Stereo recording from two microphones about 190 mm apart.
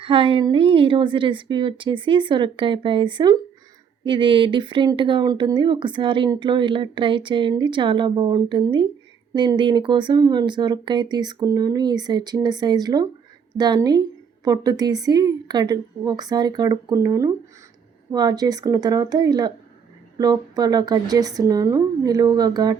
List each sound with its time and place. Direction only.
0.0 s speech: 30° right (ahead or behind)